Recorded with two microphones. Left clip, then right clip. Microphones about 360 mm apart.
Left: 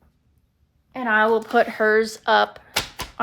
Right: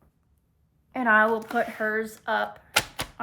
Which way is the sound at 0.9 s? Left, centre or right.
Centre.